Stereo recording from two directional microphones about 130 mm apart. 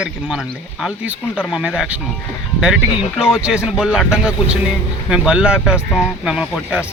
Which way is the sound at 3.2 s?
5° right (ahead or behind).